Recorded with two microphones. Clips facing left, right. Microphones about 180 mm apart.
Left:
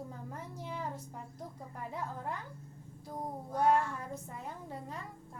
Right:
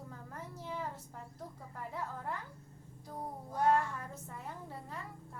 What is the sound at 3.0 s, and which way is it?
Music, 15° left (ahead or behind).